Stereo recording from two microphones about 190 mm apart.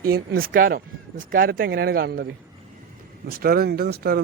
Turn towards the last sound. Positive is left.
turn(degrees=-55)  # may be behind; listen again after turning